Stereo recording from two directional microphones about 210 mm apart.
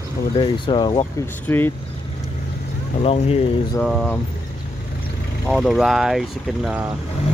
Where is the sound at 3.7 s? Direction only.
5° left (ahead or behind).